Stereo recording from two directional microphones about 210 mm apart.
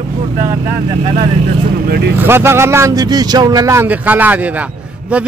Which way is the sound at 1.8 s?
50° right (ahead or behind).